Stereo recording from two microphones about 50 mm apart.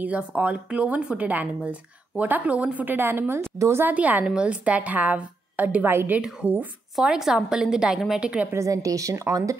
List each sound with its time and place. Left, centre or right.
0.0 s speech: right
2.2 s a woman's voice: right
3.0 s speech: right
3.5 s a woman's voice: right
3.8 s a woman's voice: right
7.2 s a woman's voice: centre
8.2 s speech: right
8.5 s a woman's voice: right